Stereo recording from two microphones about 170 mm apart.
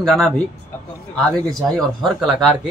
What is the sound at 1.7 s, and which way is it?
Speech, centre (ahead or behind).